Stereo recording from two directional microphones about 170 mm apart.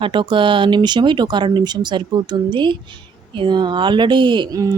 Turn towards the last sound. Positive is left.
turn(degrees=-20)  # may be behind; listen again after turning